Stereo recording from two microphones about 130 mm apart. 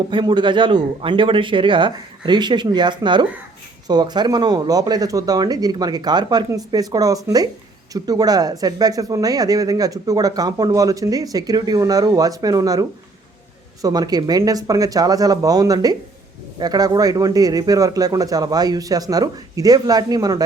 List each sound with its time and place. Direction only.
0.1 s speech: 40° right (ahead or behind)